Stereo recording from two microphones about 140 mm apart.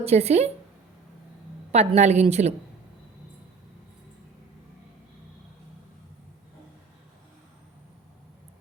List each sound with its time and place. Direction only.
0.0 s a woman's voice: 50° right (ahead or behind)
1.7 s a woman's voice: 50° right (ahead or behind)